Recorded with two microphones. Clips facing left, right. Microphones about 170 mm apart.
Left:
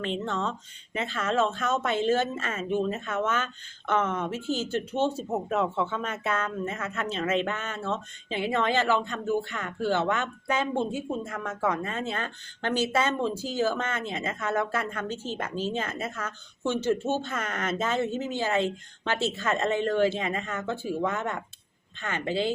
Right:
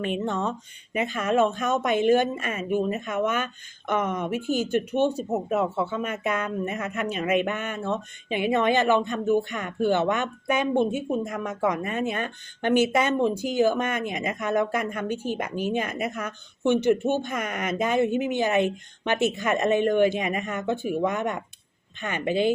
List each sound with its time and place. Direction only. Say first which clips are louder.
0.0 s speech: right 3 dB; 15° right (ahead or behind)